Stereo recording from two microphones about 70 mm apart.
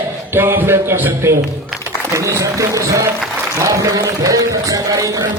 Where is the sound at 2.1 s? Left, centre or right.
Right.